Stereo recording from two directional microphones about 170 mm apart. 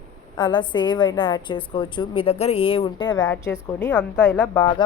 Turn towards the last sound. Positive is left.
turn(degrees=25)  # may be behind; listen again after turning